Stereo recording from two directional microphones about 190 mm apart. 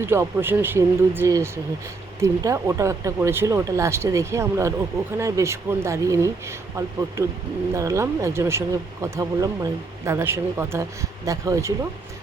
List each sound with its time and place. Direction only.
0.0 s speech: 15° right (ahead or behind)